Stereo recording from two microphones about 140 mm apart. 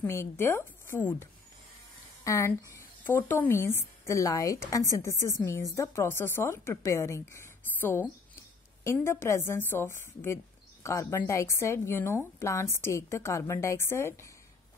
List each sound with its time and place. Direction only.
0.0 s speech: 20° left (ahead or behind)